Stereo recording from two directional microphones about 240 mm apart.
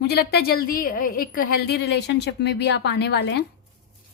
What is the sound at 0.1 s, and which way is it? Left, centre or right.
A woman's voice, left.